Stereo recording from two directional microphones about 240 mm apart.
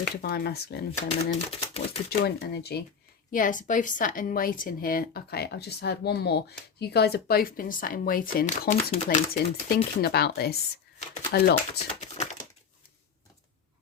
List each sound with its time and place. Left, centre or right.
0.0 s a woman's voice: left
1.1 s speech: left
2.0 s speech: left
3.3 s a woman's voice: left